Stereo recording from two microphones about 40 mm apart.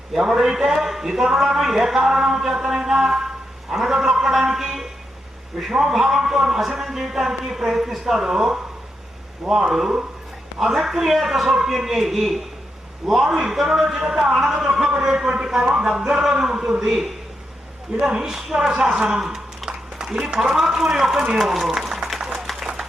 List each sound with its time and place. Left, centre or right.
0.1 s a man's voice: centre
18.2 s a man's voice: centre
19.2 s a sound: centre
20.5 s a man's voice: centre
21.8 s a sound: centre
22.6 s applause: centre